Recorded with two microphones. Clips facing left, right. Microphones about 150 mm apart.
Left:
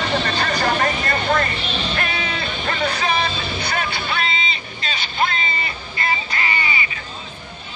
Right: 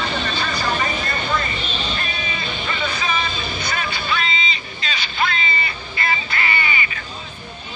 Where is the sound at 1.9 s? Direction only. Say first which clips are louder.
Left 3 dB; 65° left (ahead or behind); by 5.7 s 45° left (ahead or behind).